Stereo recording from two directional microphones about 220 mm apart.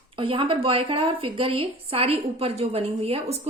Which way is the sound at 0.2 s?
25° right (ahead or behind).